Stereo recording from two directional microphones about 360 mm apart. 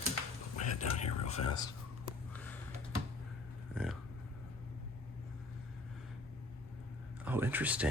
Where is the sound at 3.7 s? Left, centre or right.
Centre.